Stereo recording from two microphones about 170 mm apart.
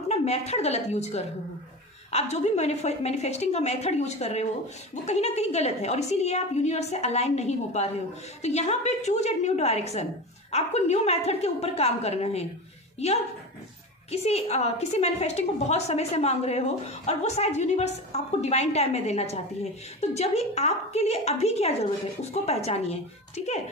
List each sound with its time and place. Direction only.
0.1 s a woman's voice: 40° left (ahead or behind)